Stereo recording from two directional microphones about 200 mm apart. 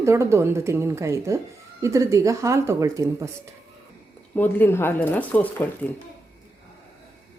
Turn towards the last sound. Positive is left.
turn(degrees=10)  # may be behind; listen again after turning